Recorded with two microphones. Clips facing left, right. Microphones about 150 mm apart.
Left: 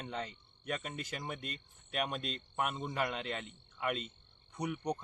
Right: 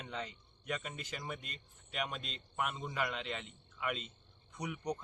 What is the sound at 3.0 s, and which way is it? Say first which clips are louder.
Speech: left 1 dB; 45° left (ahead or behind).